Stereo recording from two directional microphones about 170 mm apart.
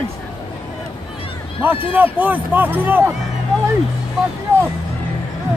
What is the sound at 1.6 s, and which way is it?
A man's voice, 10° right (ahead or behind).